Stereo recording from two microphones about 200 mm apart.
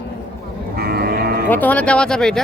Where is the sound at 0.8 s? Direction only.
50° right (ahead or behind).